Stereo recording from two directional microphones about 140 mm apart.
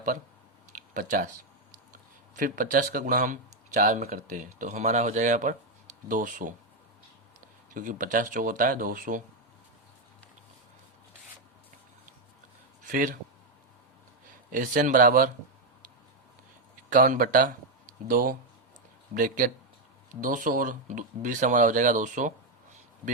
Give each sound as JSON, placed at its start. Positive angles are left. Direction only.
{"t": 0.9, "sound": "speech", "side_deg": -70}
{"t": 7.7, "sound": "speech", "side_deg": -70}
{"t": 12.8, "sound": "a sound", "side_deg": -70}
{"t": 14.5, "sound": "speech", "side_deg": -75}
{"t": 16.9, "sound": "speech", "side_deg": -75}
{"t": 20.2, "sound": "speech", "side_deg": -70}